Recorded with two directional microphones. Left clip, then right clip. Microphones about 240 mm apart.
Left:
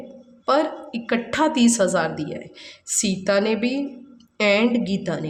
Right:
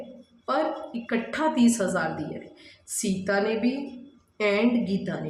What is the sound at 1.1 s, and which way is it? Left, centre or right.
A woman's voice, left.